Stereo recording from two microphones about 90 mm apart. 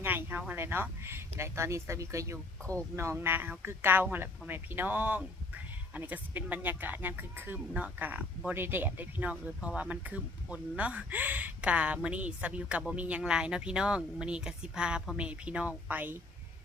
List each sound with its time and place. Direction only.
0.0 s speech: 25° right (ahead or behind)